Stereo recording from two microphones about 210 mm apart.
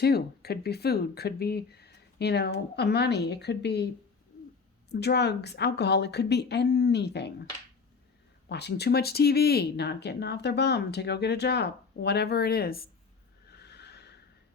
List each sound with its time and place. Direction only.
0.0 s speech: 50° left (ahead or behind)
4.9 s speech: 50° left (ahead or behind)
8.4 s speech: 50° left (ahead or behind)
13.5 s neigh: 55° left (ahead or behind)